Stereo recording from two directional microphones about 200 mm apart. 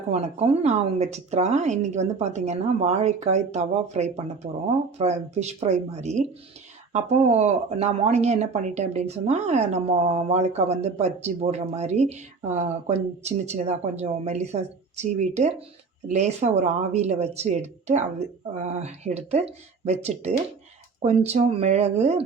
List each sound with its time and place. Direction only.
0.1 s speech: 30° right (ahead or behind)